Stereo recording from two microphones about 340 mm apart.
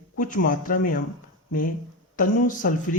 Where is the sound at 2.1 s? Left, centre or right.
Left.